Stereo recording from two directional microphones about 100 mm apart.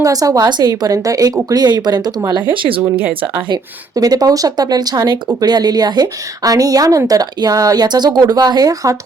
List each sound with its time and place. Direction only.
0.0 s a woman's voice: 35° right (ahead or behind)
2.3 s speech: 60° right (ahead or behind)
3.0 s speech: 20° right (ahead or behind)
3.9 s a woman's voice: 40° right (ahead or behind)